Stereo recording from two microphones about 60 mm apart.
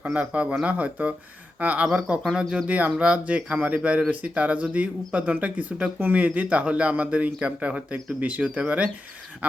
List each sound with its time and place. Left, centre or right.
0.0 s speech: right
2.6 s speech: right